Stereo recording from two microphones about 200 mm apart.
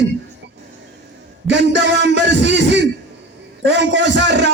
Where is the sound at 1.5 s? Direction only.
60° right (ahead or behind).